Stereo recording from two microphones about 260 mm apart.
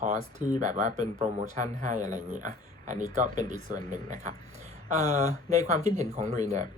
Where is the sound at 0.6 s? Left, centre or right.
Right.